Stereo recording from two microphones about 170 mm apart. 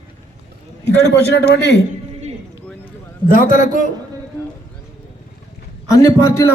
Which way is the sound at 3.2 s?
50° left (ahead or behind).